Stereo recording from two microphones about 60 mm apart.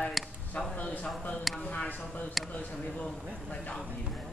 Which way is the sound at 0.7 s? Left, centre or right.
Left.